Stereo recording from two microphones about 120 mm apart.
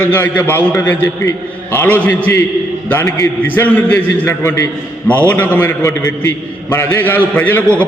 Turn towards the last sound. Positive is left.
turn(degrees=15)  # may be behind; listen again after turning